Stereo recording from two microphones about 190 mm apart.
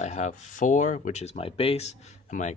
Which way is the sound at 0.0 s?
35° left (ahead or behind).